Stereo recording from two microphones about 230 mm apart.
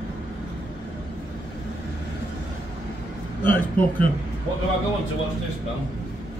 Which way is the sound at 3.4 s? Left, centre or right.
Centre.